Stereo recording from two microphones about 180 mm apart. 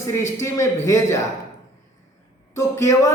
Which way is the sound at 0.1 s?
15° left (ahead or behind).